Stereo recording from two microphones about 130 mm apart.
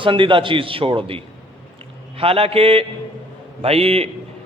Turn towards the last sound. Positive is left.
turn(degrees=-50)  # may be behind; listen again after turning